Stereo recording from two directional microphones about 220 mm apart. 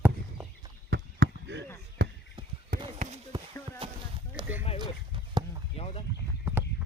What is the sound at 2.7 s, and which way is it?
Run, 25° right (ahead or behind).